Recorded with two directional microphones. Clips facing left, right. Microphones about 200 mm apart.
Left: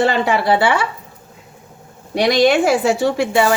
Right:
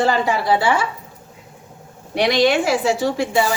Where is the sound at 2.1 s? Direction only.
40° left (ahead or behind); by 3.5 s 65° left (ahead or behind).